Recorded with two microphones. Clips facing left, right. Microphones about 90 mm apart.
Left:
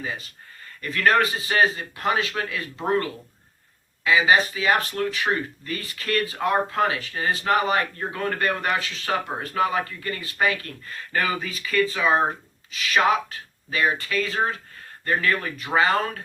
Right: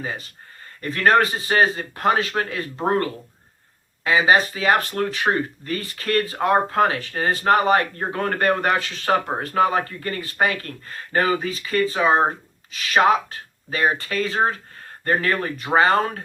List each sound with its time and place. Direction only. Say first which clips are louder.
0.0 s speech: right 2 dB; 40° right (ahead or behind)